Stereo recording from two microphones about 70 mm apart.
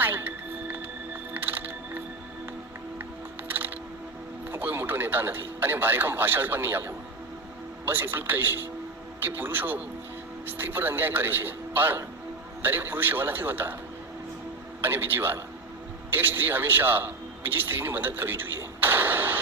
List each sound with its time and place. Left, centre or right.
0.0 s music: right
4.5 s a man's voice: right
14.8 s a man's voice: right